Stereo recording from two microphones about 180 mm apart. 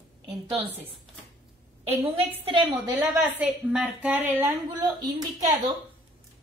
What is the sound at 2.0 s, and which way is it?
Speech, 30° right (ahead or behind).